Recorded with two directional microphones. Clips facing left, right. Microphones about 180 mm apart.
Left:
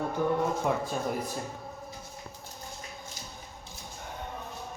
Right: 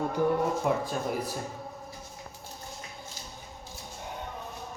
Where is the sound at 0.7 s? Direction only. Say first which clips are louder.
Right 2 dB; centre (ahead or behind).